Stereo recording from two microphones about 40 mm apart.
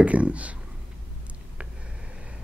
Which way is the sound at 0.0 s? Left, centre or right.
Right.